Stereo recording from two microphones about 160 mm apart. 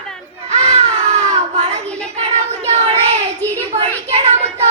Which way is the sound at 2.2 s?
40° right (ahead or behind).